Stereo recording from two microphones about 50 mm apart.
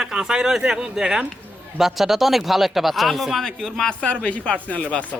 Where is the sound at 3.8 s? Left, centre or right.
Left.